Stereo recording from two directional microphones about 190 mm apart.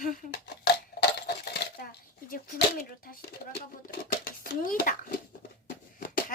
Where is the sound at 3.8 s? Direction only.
50° left (ahead or behind).